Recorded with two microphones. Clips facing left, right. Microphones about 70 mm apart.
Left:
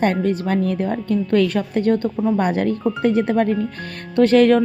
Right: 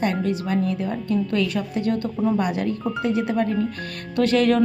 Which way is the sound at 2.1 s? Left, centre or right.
Centre.